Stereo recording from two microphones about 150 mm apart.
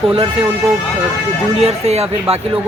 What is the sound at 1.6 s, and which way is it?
Speech, 45° right (ahead or behind).